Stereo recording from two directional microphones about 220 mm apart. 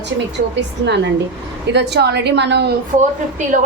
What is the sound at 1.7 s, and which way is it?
Speech, 50° right (ahead or behind).